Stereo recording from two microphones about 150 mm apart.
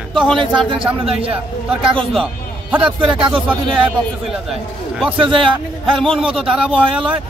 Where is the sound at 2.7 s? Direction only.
5° right (ahead or behind).